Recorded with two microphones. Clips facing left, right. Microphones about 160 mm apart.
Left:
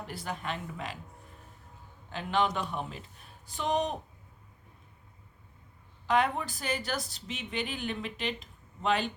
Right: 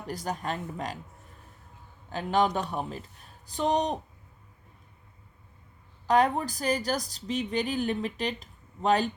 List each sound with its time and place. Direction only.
0.1 s speech: 40° right (ahead or behind)
2.0 s speech: 40° right (ahead or behind)
6.1 s speech: 40° right (ahead or behind)